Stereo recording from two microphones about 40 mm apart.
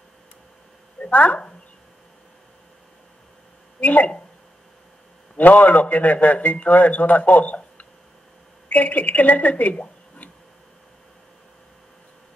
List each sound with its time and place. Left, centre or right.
1.0 s speech: left
3.8 s speech: left
5.4 s a man's voice: left